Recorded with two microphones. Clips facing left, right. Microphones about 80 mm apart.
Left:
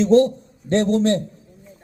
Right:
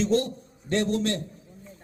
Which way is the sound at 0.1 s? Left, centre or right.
Left.